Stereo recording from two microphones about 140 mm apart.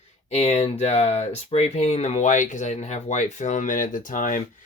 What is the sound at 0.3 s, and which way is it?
Speech, 50° left (ahead or behind).